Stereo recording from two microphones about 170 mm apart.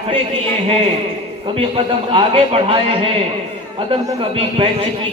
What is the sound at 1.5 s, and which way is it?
A man's voice, 30° right (ahead or behind).